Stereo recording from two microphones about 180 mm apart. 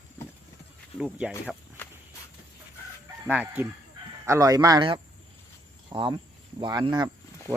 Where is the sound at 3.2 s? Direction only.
10° right (ahead or behind).